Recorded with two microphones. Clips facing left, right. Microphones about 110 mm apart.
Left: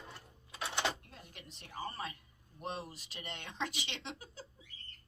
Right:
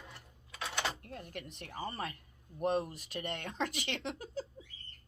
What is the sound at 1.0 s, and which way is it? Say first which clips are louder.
A woman's voice: right 9 dB; 55° right (ahead or behind).